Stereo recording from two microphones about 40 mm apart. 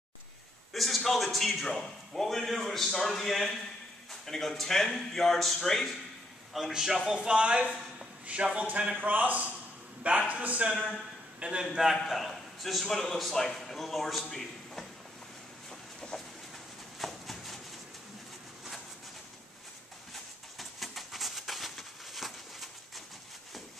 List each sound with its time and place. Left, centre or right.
0.7 s a man's voice: centre
3.3 s a man's voice: centre
6.5 s a man's voice: centre
7.1 s a man's voice: right
11.6 s a man's voice: centre
12.0 s a man's voice: centre
16.0 s train: centre
17.0 s a sound: centre
20.5 s bird: centre